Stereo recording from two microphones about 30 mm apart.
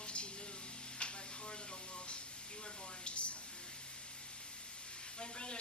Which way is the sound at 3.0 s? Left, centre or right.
Left.